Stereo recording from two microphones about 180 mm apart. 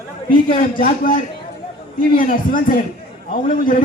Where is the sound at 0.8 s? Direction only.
50° left (ahead or behind).